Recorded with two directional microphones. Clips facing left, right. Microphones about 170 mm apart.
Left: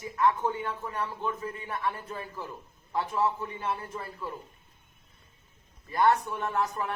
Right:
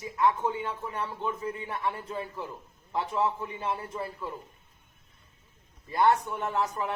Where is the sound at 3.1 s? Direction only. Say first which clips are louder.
Even; 10° right (ahead or behind).